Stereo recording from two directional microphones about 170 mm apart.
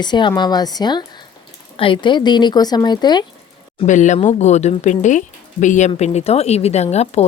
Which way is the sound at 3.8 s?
45° left (ahead or behind).